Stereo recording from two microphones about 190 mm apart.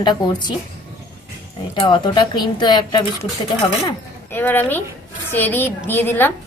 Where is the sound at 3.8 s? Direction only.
10° left (ahead or behind).